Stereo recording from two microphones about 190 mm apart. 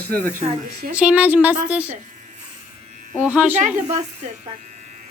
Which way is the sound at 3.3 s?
10° right (ahead or behind).